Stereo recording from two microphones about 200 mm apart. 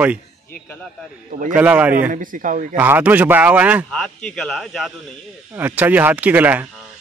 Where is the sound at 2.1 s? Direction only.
40° right (ahead or behind).